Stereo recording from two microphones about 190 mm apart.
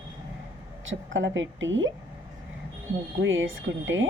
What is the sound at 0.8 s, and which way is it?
A woman's voice, 80° right.